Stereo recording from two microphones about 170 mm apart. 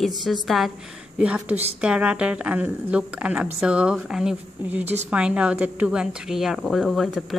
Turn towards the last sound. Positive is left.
turn(degrees=0)  # may be behind; listen again after turning